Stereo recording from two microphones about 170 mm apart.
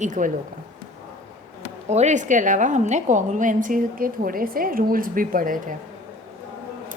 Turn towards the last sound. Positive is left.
turn(degrees=-55)  # may be behind; listen again after turning